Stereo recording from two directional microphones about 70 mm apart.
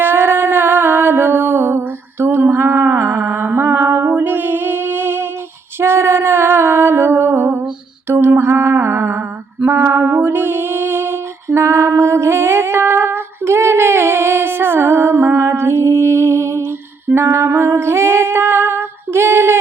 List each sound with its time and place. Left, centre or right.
0.0 s music: right
9.6 s a sound: right
17.2 s female singing: right